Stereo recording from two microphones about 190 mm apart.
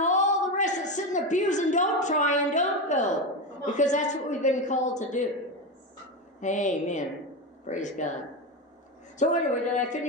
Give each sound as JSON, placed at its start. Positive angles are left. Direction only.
{"t": 0.0, "sound": "a sound", "side_deg": 40}
{"t": 3.6, "sound": "a woman's voice", "side_deg": 40}
{"t": 6.4, "sound": "a woman's voice", "side_deg": 40}
{"t": 9.2, "sound": "a woman's voice", "side_deg": 40}